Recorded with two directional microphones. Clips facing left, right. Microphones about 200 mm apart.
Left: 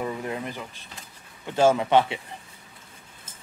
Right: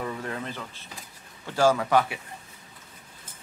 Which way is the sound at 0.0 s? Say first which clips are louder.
Left 3 dB; 15° left (ahead or behind).